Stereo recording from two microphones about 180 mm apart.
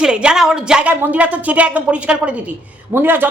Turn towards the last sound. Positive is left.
turn(degrees=-10)  # may be behind; listen again after turning